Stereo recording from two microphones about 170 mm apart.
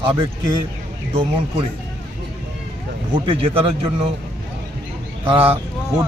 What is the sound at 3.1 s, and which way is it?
Speech, 30° right (ahead or behind).